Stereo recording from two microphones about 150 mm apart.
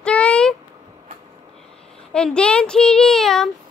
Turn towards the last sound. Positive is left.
turn(degrees=0)  # may be behind; listen again after turning